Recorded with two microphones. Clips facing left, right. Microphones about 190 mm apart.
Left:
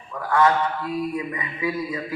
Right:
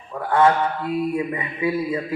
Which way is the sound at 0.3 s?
30° right (ahead or behind).